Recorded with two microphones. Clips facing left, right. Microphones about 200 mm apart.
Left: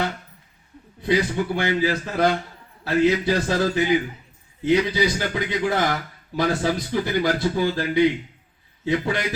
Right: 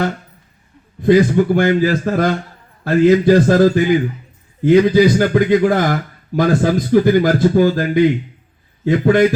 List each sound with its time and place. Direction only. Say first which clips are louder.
1.0 s a man's voice: right 10 dB; 50° right (ahead or behind)